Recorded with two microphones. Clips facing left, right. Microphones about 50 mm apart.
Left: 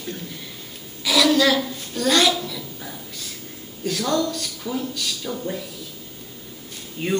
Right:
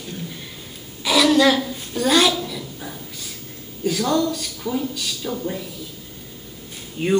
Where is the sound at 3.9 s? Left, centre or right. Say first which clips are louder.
Right 2 dB; centre.